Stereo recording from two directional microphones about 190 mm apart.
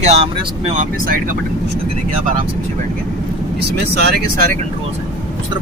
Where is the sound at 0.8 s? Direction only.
50° right (ahead or behind).